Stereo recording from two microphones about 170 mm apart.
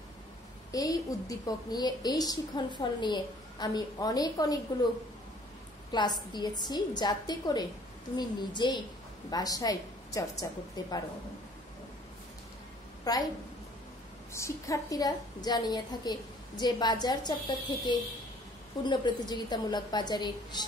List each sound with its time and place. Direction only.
0.7 s a woman's voice: 20° left (ahead or behind)
5.9 s a woman's voice: 25° left (ahead or behind)
13.1 s a woman's voice: 20° left (ahead or behind)
14.3 s a woman's voice: 15° left (ahead or behind)